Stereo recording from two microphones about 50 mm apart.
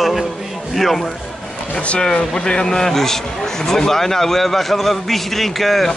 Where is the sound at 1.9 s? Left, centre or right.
Left.